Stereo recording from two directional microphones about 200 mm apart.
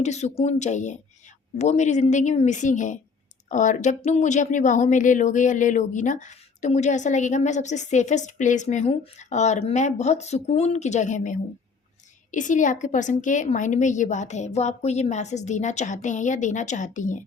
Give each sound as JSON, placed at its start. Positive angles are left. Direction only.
{"t": 0.0, "sound": "speech", "side_deg": 35}